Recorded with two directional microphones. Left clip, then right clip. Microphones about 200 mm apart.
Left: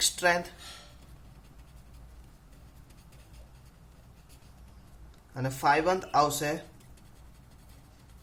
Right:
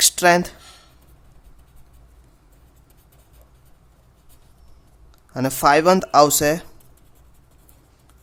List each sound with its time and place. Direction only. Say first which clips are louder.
0.0 s speech: right 11 dB; 60° right (ahead or behind)
5.3 s speech: right 10 dB; 60° right (ahead or behind)